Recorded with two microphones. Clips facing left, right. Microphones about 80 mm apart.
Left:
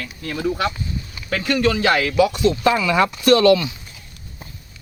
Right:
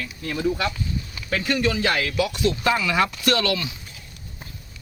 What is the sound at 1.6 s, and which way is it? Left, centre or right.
Speech, left.